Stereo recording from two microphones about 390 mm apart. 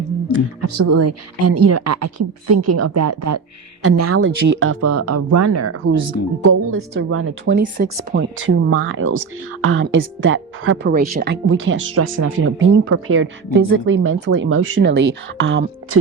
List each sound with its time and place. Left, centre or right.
0.6 s speech: right